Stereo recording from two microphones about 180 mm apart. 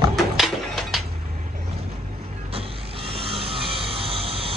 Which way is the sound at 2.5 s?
30° right (ahead or behind).